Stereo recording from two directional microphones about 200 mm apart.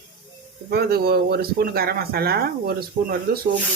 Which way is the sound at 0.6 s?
50° right (ahead or behind).